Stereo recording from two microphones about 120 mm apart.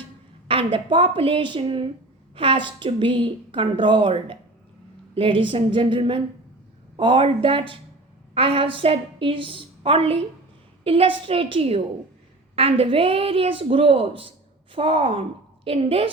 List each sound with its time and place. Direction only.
0.4 s a woman's voice: 45° right (ahead or behind)